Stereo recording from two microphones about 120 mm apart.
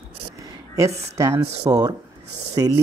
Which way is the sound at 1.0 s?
25° right (ahead or behind).